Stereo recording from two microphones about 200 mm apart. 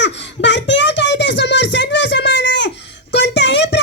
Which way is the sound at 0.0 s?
60° left (ahead or behind).